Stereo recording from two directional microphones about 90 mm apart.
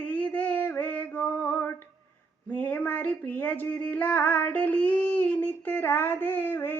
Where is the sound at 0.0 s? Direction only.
15° left (ahead or behind).